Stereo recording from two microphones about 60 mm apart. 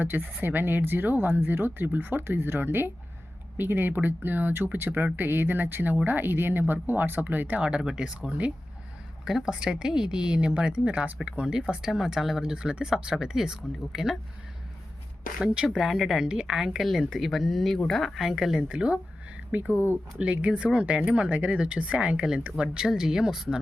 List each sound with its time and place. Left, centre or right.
0.0 s speech: right
7.6 s a woman's voice: centre
15.4 s a woman's voice: centre
15.8 s a woman's voice: centre; by 19.7 s right
19.7 s speech: left
20.1 s a woman's voice: right